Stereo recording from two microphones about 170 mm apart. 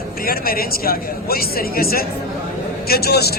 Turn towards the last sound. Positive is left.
turn(degrees=70)  # may be behind; listen again after turning